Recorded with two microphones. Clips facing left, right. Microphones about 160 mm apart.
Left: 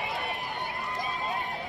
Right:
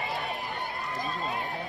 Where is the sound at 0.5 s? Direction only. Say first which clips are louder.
Even; 20° left (ahead or behind).